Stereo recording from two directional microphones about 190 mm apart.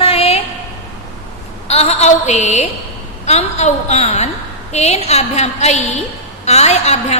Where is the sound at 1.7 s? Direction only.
35° left (ahead or behind).